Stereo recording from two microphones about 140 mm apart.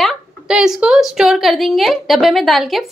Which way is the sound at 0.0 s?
5° right (ahead or behind).